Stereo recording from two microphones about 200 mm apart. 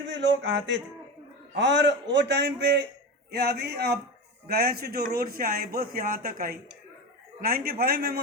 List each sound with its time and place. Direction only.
0.1 s a man's voice: 65° right (ahead or behind)